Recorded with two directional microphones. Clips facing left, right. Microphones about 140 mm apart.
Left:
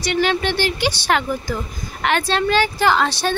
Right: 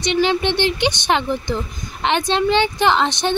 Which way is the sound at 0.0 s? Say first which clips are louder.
Right 2 dB; 20° right (ahead or behind).